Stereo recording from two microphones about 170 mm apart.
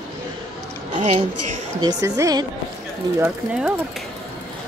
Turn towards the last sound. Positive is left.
turn(degrees=-5)  # may be behind; listen again after turning